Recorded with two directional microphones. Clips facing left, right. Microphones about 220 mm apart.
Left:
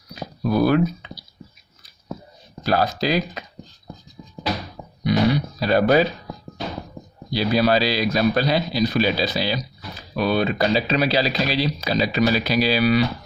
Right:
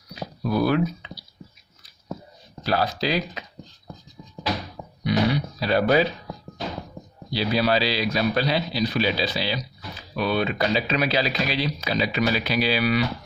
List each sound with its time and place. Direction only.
0.1 s dog: 45° left (ahead or behind)
2.6 s speech: 45° left (ahead or behind)
5.0 s throat clearing: 45° left (ahead or behind)
7.3 s speech: 45° left (ahead or behind)